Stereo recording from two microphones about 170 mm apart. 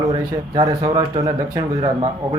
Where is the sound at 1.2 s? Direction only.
25° right (ahead or behind).